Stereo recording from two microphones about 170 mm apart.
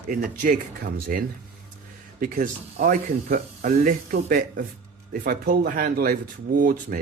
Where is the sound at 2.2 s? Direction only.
50° right (ahead or behind).